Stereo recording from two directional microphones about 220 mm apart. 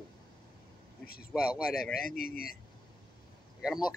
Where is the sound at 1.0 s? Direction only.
45° left (ahead or behind).